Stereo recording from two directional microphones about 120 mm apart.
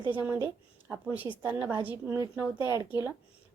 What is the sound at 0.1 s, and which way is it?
A woman's voice, 15° right (ahead or behind).